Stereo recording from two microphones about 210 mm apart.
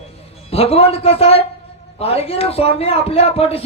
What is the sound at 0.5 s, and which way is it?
Speech, 25° left (ahead or behind).